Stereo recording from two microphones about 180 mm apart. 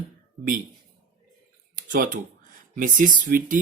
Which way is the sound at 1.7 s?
50° right (ahead or behind).